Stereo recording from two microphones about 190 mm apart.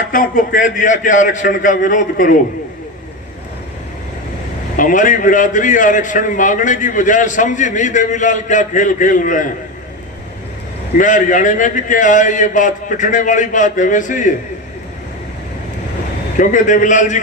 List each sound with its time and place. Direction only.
0.1 s a man's voice: 45° left (ahead or behind)
4.8 s a man's voice: 45° left (ahead or behind)
10.9 s a man's voice: 45° left (ahead or behind)
16.4 s a man's voice: 45° left (ahead or behind)